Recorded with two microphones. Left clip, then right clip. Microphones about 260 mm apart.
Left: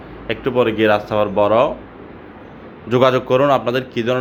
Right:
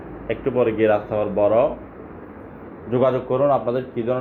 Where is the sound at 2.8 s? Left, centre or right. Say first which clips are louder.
Left 5 dB; left.